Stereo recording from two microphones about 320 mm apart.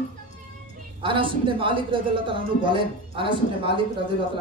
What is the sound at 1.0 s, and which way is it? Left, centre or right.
A man's voice, centre.